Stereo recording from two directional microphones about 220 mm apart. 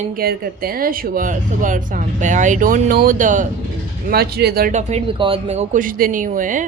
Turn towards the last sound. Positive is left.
turn(degrees=-35)  # may be behind; listen again after turning